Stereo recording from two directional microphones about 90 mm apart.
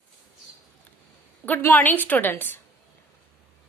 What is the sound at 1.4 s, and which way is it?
A woman's voice, 20° left (ahead or behind).